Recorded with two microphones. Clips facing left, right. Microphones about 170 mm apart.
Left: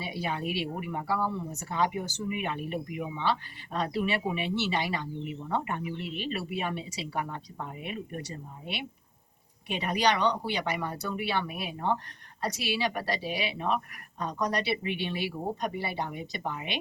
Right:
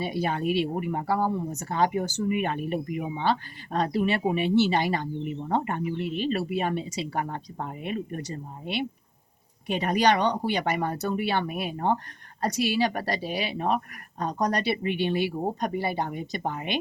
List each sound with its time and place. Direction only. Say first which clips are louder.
0.0 s speech: right 6 dB; 45° right (ahead or behind)
9.6 s speech: right 5 dB; 45° right (ahead or behind)